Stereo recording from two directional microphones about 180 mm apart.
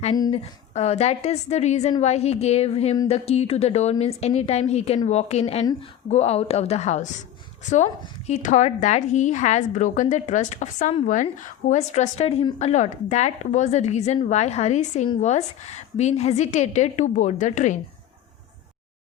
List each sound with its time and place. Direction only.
0.1 s speech: 25° left (ahead or behind)
0.7 s a woman's voice: 35° left (ahead or behind)